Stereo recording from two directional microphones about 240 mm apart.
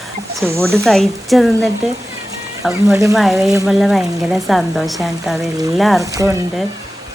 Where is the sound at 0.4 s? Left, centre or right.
Centre.